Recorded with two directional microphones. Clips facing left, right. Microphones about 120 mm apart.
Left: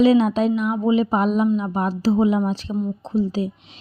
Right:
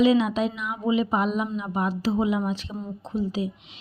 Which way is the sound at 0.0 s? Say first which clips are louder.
Left 4 dB; 35° left (ahead or behind).